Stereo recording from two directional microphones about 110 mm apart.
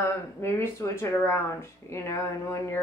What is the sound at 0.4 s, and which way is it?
Speech, 25° left (ahead or behind).